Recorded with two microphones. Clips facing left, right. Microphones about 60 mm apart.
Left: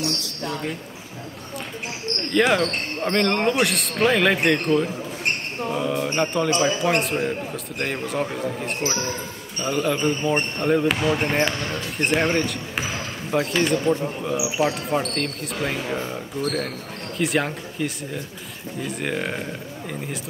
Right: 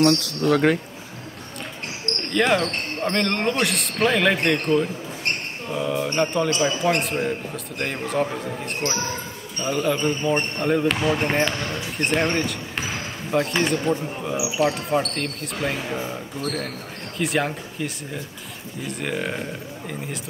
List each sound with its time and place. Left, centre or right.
0.0 s speech: right
2.3 s speech: centre
5.2 s a sound: centre
6.0 s speech: centre